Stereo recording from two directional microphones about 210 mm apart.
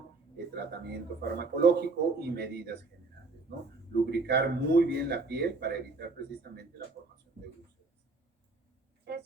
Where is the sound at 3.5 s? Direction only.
50° right (ahead or behind).